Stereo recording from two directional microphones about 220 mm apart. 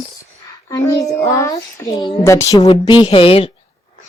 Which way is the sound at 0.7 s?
15° left (ahead or behind).